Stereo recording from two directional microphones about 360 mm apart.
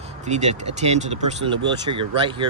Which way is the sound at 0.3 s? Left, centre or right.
Centre.